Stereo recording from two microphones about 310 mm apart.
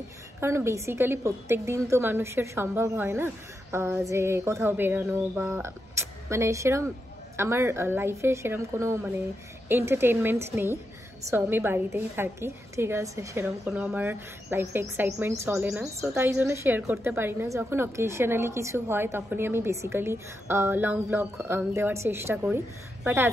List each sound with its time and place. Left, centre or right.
0.4 s a woman's voice: centre